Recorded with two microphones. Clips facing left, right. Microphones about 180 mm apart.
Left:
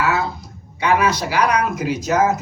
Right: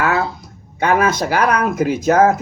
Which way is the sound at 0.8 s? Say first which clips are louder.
Right 2 dB; 50° right (ahead or behind).